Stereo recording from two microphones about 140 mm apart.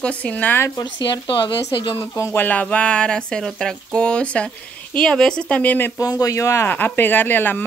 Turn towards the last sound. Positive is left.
turn(degrees=15)  # may be behind; listen again after turning